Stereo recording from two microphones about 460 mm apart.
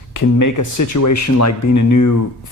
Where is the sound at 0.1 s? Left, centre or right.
Left.